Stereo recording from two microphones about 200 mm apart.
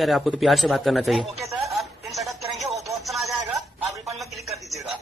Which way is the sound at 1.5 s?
Centre (ahead or behind).